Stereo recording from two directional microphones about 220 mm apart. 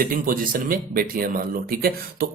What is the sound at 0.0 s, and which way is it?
Speech, 40° right (ahead or behind).